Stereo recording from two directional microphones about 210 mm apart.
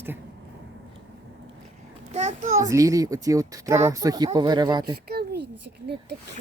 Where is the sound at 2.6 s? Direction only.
15° right (ahead or behind).